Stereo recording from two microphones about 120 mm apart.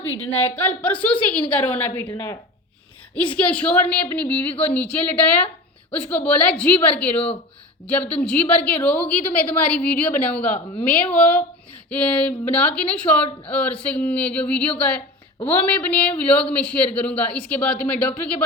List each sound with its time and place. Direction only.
0.2 s a woman's voice: 15° left (ahead or behind)
2.0 s speech: 25° left (ahead or behind)
3.3 s a woman's voice: 10° left (ahead or behind)